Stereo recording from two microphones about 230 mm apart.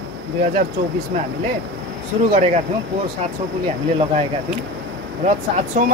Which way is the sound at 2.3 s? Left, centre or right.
Right.